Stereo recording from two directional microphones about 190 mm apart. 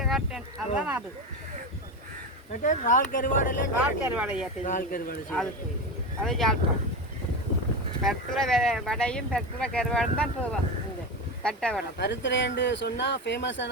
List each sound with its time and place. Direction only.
0.0 s speech: centre (ahead or behind)
2.6 s speech: 40° left (ahead or behind)
3.8 s speech: 10° right (ahead or behind)
4.6 s speech: 45° left (ahead or behind)
6.2 s speech: centre (ahead or behind)
8.0 s speech: centre (ahead or behind)
11.9 s speech: 70° left (ahead or behind)